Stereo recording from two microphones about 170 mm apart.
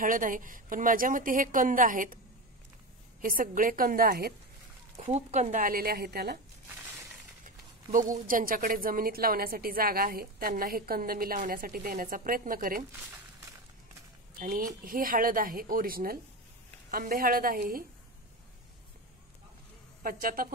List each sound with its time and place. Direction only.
0.0 s a woman's voice: 50° right (ahead or behind)
3.2 s a woman's voice: 55° right (ahead or behind)
4.9 s a woman's voice: 40° right (ahead or behind); by 6.4 s 65° right (ahead or behind)
7.4 s a sound: 50° right (ahead or behind)
8.3 s a woman's voice: 55° right (ahead or behind)
14.4 s a woman's voice: 55° right (ahead or behind)
20.0 s a woman's voice: 55° right (ahead or behind)